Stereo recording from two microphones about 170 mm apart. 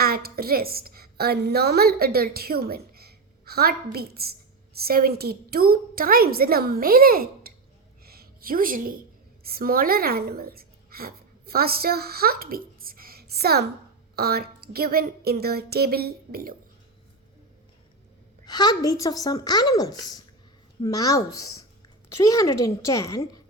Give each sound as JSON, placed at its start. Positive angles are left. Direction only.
{"t": 0.0, "sound": "a woman's voice", "side_deg": -65}
{"t": 8.0, "sound": "a sound", "side_deg": -65}
{"t": 9.4, "sound": "a woman's voice", "side_deg": -65}
{"t": 18.4, "sound": "speech", "side_deg": 25}